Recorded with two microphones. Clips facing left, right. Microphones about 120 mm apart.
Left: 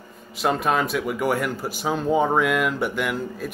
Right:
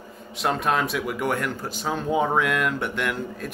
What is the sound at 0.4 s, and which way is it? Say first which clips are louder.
Speech: left 2 dB; centre (ahead or behind).